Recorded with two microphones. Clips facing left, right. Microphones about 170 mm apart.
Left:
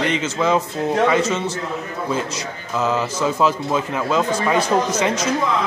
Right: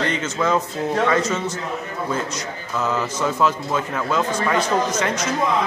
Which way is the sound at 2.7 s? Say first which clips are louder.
Left 3 dB; 15° left (ahead or behind).